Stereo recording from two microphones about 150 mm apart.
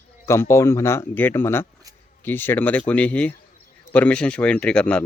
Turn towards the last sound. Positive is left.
turn(degrees=5)  # may be behind; listen again after turning